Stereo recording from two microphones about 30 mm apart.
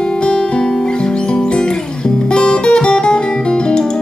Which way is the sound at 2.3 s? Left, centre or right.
Left.